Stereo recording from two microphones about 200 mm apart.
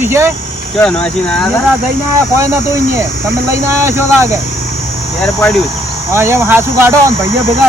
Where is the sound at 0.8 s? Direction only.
5° left (ahead or behind).